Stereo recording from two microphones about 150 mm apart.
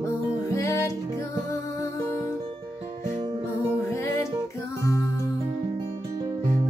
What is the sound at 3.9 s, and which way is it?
Music, 20° left (ahead or behind).